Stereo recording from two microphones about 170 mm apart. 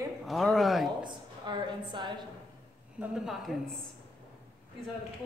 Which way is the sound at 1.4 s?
25° right (ahead or behind).